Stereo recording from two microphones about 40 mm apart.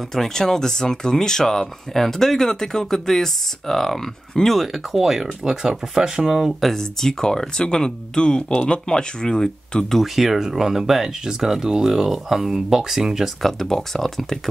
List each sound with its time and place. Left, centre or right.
0.1 s speech: centre
4.6 s speech: centre
6.6 s speech: centre
10.1 s speech: centre
13.4 s speech: centre